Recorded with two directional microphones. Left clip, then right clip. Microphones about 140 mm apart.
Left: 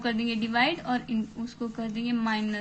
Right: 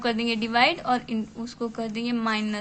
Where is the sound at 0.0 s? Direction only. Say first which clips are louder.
Right 4 dB; 50° right (ahead or behind).